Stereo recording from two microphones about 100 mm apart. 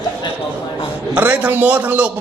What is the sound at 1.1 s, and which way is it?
A man's voice, 15° right (ahead or behind).